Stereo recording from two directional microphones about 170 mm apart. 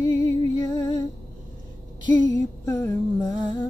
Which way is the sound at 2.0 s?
25° left (ahead or behind).